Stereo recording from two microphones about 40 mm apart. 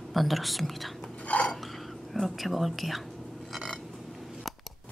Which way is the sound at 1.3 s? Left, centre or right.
Left.